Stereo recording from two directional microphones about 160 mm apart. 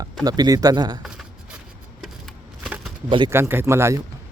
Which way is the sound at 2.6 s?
5° right (ahead or behind).